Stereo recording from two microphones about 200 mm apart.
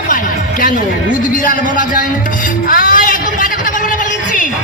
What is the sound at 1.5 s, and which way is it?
Speech, 45° left (ahead or behind).